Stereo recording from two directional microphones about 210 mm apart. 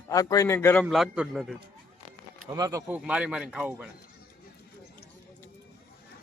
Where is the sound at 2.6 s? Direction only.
15° right (ahead or behind).